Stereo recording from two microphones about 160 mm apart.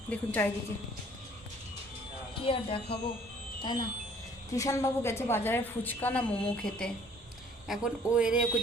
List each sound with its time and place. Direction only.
0.1 s a woman's voice: 10° left (ahead or behind)
2.4 s speech: 35° left (ahead or behind)
4.5 s a woman's voice: 20° left (ahead or behind)
7.7 s speech: 5° right (ahead or behind)